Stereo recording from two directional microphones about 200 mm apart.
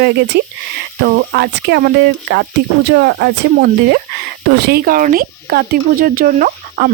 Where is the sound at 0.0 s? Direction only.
55° right (ahead or behind).